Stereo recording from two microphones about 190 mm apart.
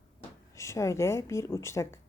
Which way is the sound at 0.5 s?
15° left (ahead or behind).